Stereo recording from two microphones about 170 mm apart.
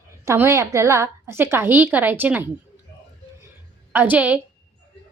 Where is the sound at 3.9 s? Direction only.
10° right (ahead or behind).